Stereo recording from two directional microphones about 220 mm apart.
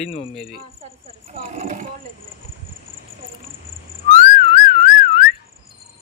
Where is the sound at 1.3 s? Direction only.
30° right (ahead or behind).